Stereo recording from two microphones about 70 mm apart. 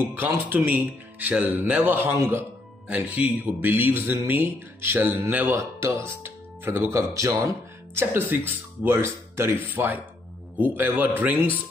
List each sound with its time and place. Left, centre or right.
0.1 s speech: right
5.6 s speech: right
7.0 s speech: right
7.9 s speech: right